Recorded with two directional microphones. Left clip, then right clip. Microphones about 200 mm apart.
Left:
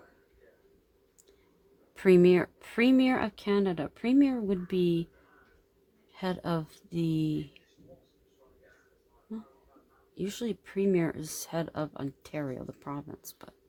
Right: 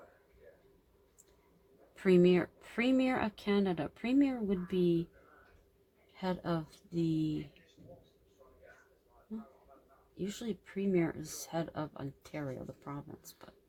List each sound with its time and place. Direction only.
2.0 s speech: 45° left (ahead or behind)
6.1 s speech: 50° left (ahead or behind)
10.2 s speech: 45° left (ahead or behind)